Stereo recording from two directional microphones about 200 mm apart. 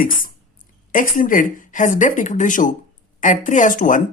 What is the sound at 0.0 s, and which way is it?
A woman's voice, 40° left (ahead or behind).